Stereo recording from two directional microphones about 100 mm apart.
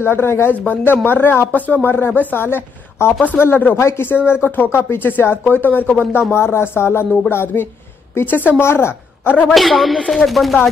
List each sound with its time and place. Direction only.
0.0 s a woman's voice: 25° left (ahead or behind)
9.5 s speech: centre (ahead or behind)